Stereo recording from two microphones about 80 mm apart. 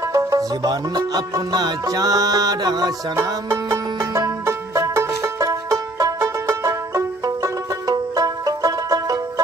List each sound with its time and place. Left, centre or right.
0.1 s music: right
3.2 s music: right
6.2 s banjo: right
7.4 s banjo: right